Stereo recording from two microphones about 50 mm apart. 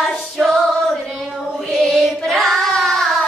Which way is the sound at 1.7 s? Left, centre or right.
Centre.